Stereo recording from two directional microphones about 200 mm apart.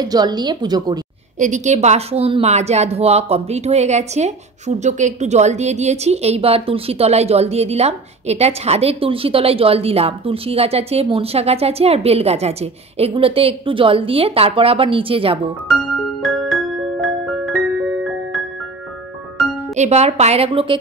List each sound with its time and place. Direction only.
0.0 s a woman's voice: 20° right (ahead or behind)
1.4 s a woman's voice: 35° right (ahead or behind)
15.7 s music: centre (ahead or behind)
19.7 s a woman's voice: 35° right (ahead or behind)